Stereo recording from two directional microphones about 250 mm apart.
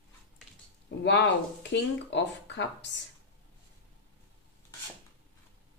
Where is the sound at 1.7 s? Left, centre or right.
Left.